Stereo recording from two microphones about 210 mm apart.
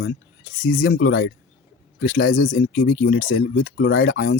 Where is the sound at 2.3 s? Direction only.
40° left (ahead or behind).